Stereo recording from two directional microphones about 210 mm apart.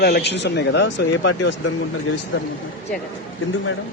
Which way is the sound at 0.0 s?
50° left (ahead or behind).